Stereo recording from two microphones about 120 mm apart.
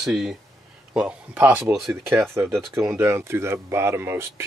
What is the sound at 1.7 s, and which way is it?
Speech, 5° right (ahead or behind).